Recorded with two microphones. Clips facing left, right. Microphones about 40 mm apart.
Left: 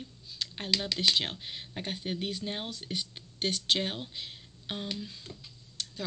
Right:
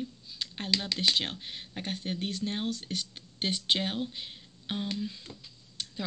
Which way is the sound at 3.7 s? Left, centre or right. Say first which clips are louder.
Right 1 dB; centre.